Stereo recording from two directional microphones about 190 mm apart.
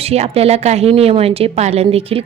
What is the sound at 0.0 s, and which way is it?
A woman's voice, 35° right (ahead or behind).